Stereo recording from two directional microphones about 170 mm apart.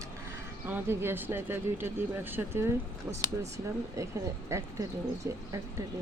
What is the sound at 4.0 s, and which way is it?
Speech, 20° right (ahead or behind).